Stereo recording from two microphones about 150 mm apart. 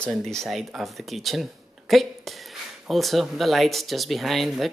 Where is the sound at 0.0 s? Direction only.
5° left (ahead or behind).